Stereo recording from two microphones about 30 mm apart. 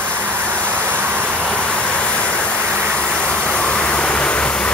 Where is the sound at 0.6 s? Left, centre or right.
Right.